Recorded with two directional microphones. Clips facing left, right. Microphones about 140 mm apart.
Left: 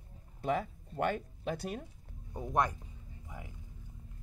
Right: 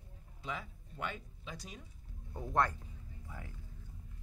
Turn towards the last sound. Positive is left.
turn(degrees=15)  # may be behind; listen again after turning